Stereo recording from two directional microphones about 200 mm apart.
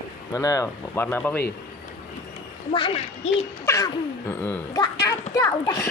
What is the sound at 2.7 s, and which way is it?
A woman's voice, 25° left (ahead or behind).